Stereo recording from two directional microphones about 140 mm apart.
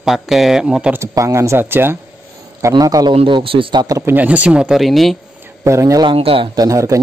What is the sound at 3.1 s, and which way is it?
Speech, 40° right (ahead or behind).